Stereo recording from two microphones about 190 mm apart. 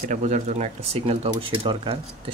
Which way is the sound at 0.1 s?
40° right (ahead or behind).